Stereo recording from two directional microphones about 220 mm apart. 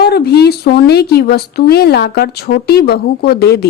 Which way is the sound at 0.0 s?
45° left (ahead or behind).